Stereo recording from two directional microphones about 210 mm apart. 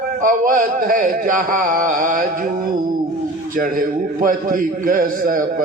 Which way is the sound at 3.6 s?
40° right (ahead or behind).